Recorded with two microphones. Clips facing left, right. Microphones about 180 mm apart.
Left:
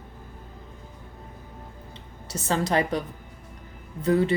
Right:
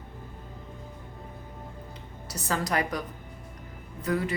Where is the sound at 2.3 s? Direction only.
25° left (ahead or behind).